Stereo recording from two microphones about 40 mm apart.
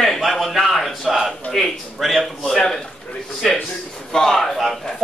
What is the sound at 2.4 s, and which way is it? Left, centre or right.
Speech, centre.